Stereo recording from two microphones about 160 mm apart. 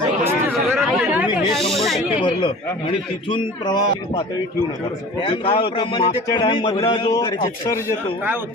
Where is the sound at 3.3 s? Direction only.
25° left (ahead or behind).